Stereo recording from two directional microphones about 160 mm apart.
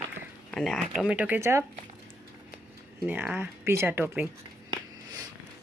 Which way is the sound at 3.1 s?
10° right (ahead or behind).